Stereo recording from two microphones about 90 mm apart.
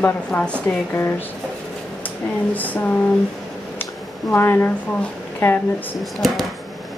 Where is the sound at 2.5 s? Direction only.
20° left (ahead or behind).